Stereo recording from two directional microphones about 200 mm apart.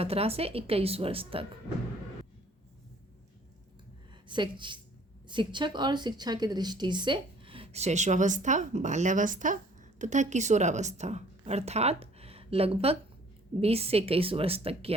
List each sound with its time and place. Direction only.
0.0 s a woman's voice: 30° right (ahead or behind)
4.3 s a woman's voice: 25° right (ahead or behind)